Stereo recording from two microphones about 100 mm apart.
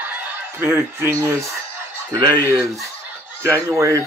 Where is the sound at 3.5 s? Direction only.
30° right (ahead or behind).